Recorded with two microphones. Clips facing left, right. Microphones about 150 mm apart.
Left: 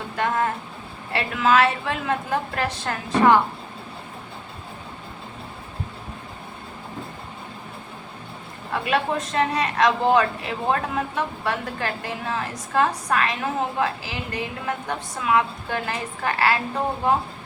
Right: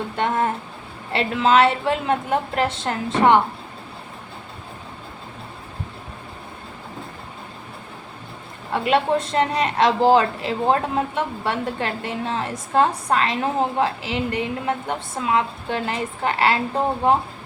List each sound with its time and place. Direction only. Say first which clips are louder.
0.2 s a woman's voice: right 1 dB; 25° right (ahead or behind)
8.7 s a woman's voice: right 4 dB; 25° right (ahead or behind)